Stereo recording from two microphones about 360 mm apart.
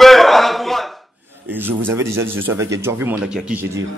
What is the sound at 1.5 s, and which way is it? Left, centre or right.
Speech, centre.